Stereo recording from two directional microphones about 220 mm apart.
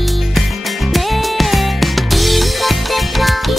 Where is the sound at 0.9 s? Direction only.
Centre (ahead or behind).